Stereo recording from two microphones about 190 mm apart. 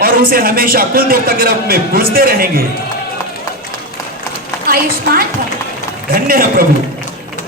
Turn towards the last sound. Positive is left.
turn(degrees=-50)  # may be behind; listen again after turning